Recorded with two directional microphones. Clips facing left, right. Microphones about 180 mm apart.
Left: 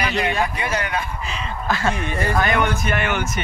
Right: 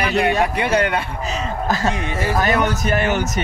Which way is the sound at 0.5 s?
65° right (ahead or behind).